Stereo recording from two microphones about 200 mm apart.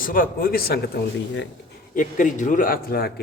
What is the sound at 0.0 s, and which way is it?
Speech, 45° left (ahead or behind).